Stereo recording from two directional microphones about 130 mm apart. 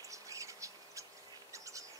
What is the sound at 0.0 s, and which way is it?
Insect, 25° right (ahead or behind).